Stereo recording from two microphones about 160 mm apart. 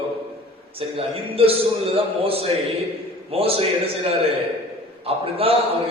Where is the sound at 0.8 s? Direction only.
35° right (ahead or behind).